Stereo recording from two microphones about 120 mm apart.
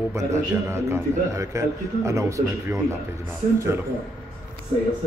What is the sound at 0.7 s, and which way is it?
A man's voice, 25° right (ahead or behind).